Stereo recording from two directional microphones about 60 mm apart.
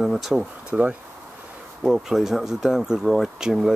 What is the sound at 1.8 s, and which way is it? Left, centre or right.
Speech, centre.